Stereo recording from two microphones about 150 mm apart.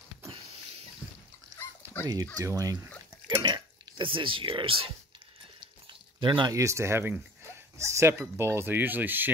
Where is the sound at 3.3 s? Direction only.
25° right (ahead or behind).